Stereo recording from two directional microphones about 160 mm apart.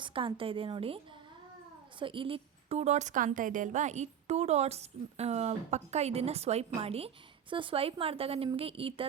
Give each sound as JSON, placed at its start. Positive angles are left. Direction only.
{"t": 0.0, "sound": "a woman's voice", "side_deg": -30}